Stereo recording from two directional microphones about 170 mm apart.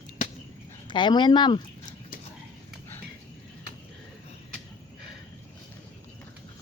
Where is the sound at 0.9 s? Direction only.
25° left (ahead or behind).